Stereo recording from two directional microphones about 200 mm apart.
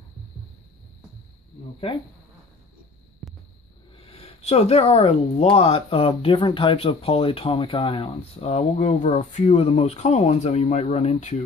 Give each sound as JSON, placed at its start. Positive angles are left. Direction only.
{"t": 1.9, "sound": "speech", "side_deg": 30}
{"t": 3.9, "sound": "speech", "side_deg": 30}